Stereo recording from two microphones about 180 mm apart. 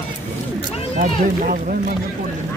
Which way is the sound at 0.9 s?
50° right (ahead or behind).